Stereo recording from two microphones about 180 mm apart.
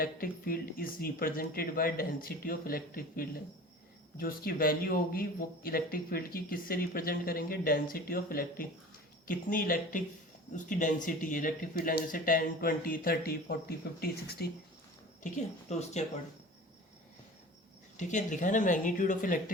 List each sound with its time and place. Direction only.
0.0 s speech: 55° left (ahead or behind)
15.2 s speech: 40° left (ahead or behind)
17.9 s speech: 45° left (ahead or behind)